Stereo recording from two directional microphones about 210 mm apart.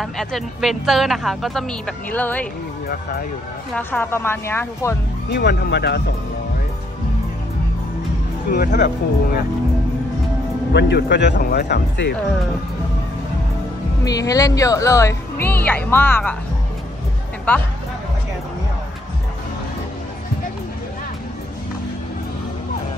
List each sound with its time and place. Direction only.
0.0 s speech: centre (ahead or behind)
2.9 s speech: 45° left (ahead or behind)
3.7 s speech: 10° left (ahead or behind)
5.3 s speech: 55° left (ahead or behind)
8.5 s speech: 50° left (ahead or behind)
10.7 s speech: 55° left (ahead or behind)
14.0 s speech: 15° left (ahead or behind)
17.5 s speech: 10° left (ahead or behind)